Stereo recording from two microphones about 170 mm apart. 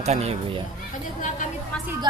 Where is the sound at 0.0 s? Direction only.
40° right (ahead or behind).